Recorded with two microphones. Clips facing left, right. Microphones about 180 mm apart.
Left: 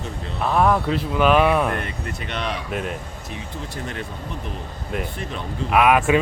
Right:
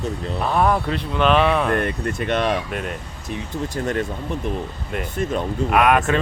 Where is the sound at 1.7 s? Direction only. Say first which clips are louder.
Right 6 dB; 50° right (ahead or behind).